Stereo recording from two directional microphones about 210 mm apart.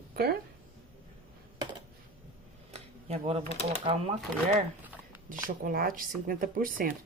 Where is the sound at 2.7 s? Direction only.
30° right (ahead or behind).